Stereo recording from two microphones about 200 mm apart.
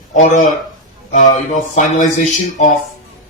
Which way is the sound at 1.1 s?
40° left (ahead or behind).